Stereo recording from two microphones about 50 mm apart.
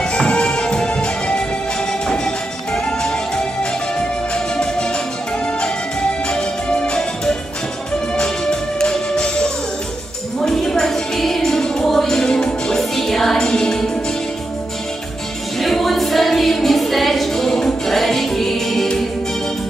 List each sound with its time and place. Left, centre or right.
0.0 s music: centre
6.2 s music: centre
15.5 s music: centre